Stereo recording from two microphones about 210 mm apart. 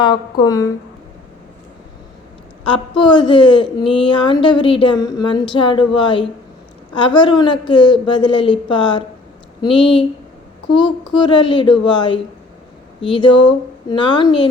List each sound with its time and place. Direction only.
0.0 s a woman's voice: 20° left (ahead or behind)
2.6 s a woman's voice: 25° left (ahead or behind)